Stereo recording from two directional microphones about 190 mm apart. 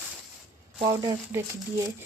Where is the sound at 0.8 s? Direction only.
20° right (ahead or behind).